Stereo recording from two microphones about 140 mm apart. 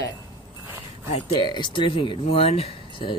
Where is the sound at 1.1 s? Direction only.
35° left (ahead or behind).